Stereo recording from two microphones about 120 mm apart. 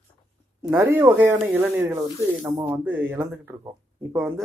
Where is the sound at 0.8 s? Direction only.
20° right (ahead or behind).